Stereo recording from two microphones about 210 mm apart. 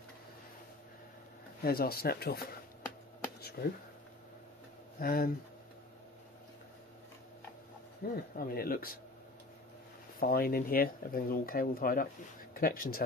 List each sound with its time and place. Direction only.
1.6 s speech: 45° left (ahead or behind)
3.6 s speech: 45° left (ahead or behind)
4.9 s speech: 45° left (ahead or behind)
8.0 s speech: 45° left (ahead or behind)
10.2 s speech: 45° left (ahead or behind)